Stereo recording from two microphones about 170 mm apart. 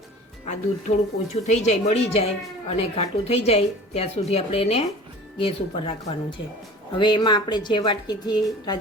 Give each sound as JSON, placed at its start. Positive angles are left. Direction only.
{"t": 0.4, "sound": "a woman's voice", "side_deg": 45}